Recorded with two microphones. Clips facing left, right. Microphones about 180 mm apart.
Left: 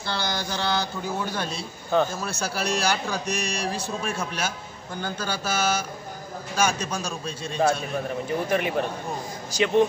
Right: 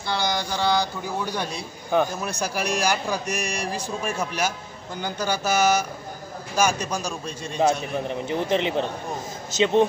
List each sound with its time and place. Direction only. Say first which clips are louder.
0.0 s mantra: right 3 dB; 15° right (ahead or behind)
1.3 s a man's voice: right 1 dB; 15° right (ahead or behind)